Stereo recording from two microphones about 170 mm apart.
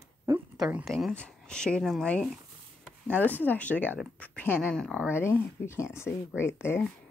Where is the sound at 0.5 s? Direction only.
Centre (ahead or behind); by 6.8 s 15° left (ahead or behind).